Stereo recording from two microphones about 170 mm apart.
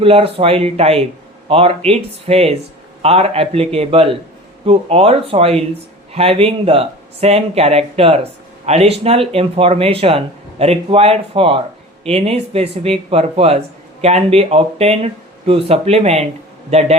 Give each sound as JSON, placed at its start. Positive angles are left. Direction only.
{"t": 0.0, "sound": "speech", "side_deg": -35}